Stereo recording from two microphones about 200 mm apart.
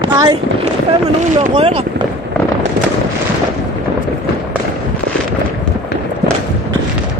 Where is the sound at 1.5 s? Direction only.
25° right (ahead or behind).